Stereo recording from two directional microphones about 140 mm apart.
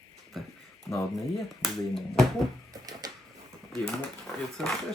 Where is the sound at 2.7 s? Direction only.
25° right (ahead or behind).